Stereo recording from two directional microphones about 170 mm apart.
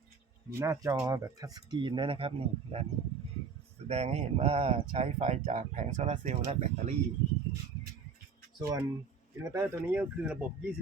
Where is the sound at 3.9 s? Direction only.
40° right (ahead or behind).